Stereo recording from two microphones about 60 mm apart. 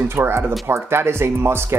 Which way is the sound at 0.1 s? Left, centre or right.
Right.